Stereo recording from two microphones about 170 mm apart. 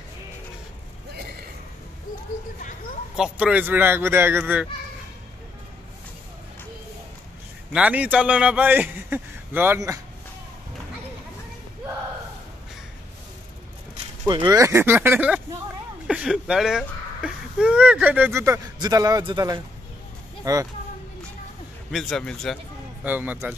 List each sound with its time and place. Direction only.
3.2 s a man's voice: 5° right (ahead or behind)
7.7 s a man's voice: 10° right (ahead or behind)
14.2 s a man's voice: 20° right (ahead or behind)
21.9 s a man's voice: 5° left (ahead or behind)
23.0 s a man's voice: 10° right (ahead or behind)